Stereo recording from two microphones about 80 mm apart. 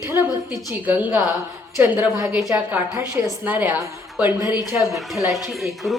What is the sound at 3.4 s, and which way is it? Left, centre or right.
Speech, right.